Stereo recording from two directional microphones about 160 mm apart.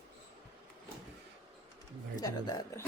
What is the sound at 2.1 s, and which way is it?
Speech, 25° left (ahead or behind).